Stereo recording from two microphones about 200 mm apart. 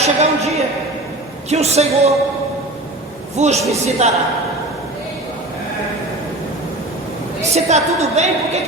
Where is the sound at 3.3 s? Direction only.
35° right (ahead or behind).